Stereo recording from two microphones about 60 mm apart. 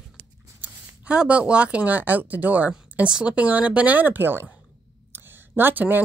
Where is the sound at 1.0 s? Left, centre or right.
Centre; by 4.5 s right.